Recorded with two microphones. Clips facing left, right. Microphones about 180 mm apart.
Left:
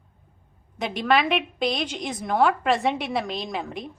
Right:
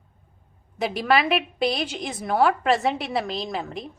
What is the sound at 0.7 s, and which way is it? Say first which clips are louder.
A woman's voice: right 1 dB; 5° right (ahead or behind).